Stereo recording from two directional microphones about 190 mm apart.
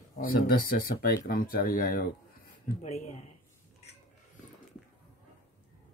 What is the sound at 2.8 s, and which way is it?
Speech, 35° left (ahead or behind).